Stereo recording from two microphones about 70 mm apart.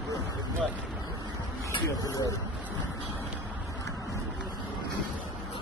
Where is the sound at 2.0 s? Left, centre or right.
Left.